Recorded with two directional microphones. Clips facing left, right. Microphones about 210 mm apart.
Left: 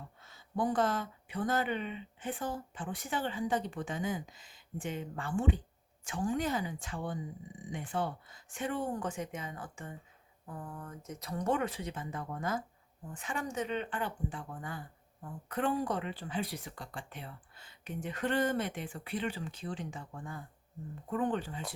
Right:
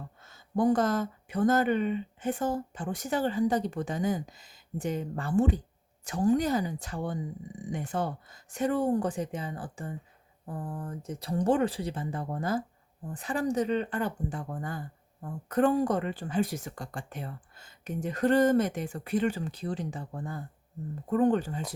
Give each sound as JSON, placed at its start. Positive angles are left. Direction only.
{"t": 0.2, "sound": "speech", "side_deg": -45}